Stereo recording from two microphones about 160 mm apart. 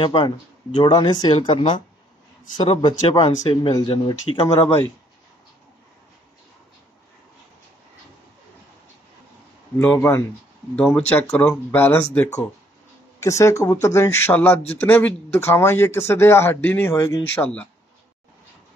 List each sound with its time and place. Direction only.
0.0 s speech: 30° left (ahead or behind)
2.8 s speech: 30° left (ahead or behind)
9.8 s speech: 15° left (ahead or behind)
13.2 s speech: 20° left (ahead or behind)
17.4 s speech: 5° left (ahead or behind)